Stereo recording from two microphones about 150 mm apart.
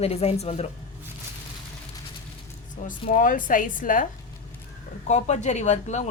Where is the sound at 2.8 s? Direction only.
60° left (ahead or behind).